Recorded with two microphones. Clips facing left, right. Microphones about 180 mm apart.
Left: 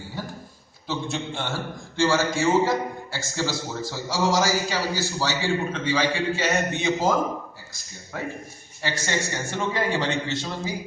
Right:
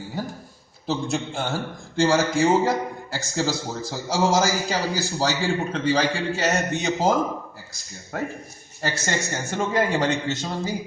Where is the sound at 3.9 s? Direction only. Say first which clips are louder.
Right 3 dB; 40° right (ahead or behind).